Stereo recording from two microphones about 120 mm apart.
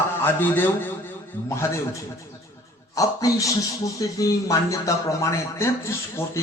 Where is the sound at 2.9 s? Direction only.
30° left (ahead or behind).